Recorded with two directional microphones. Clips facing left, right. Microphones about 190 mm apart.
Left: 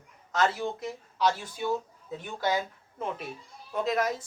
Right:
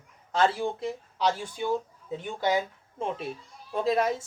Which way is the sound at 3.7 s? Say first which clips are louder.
Right 3 dB; 30° right (ahead or behind).